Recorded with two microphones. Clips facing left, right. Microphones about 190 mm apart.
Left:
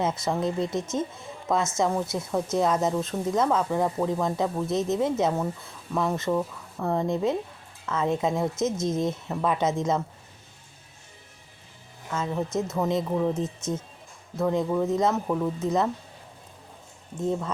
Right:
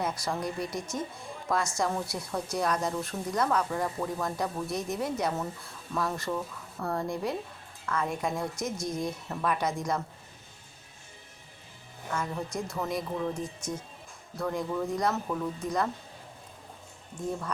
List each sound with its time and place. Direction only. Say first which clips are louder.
0.0 s a woman's voice: left 6 dB; 25° left (ahead or behind)
12.1 s a woman's voice: left 6 dB; 20° left (ahead or behind)
17.2 s a woman's voice: left 6 dB; 25° left (ahead or behind)